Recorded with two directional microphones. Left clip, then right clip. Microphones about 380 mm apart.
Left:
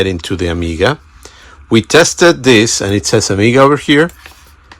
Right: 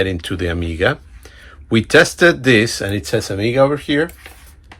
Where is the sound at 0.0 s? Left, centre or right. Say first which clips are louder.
Left 4 dB; centre.